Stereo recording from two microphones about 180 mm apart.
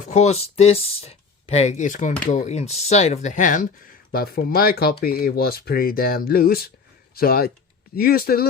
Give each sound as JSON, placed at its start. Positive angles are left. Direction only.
{"t": 0.0, "sound": "speech", "side_deg": 40}
{"t": 4.1, "sound": "speech", "side_deg": 55}